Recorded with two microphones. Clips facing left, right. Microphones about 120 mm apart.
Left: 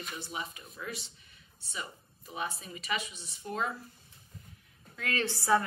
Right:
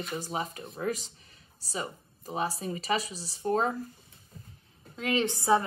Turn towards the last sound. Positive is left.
turn(degrees=-20)  # may be behind; listen again after turning